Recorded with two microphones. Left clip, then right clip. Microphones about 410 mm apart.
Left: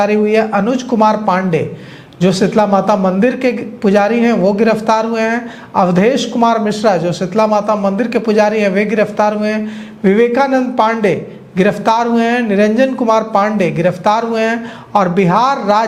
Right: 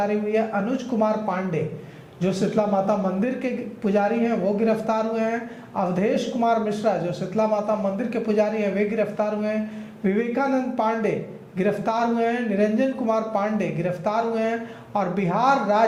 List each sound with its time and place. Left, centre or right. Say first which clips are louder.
0.0 s a man's voice: left 11 dB; left